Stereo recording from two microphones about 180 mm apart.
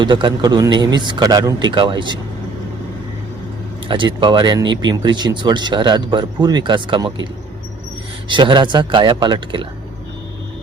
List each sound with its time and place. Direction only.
0.0 s speech: 25° right (ahead or behind)
3.8 s speech: 25° right (ahead or behind)
8.3 s speech: 25° right (ahead or behind)